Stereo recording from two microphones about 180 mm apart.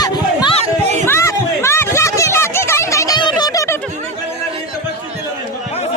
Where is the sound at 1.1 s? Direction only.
15° left (ahead or behind).